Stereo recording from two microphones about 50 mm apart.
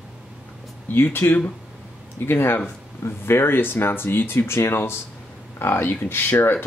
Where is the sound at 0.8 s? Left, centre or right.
Left.